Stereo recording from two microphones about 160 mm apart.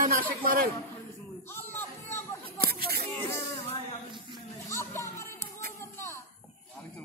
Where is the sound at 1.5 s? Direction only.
15° left (ahead or behind).